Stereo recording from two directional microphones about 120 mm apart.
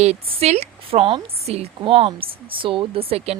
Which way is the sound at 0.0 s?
60° right (ahead or behind).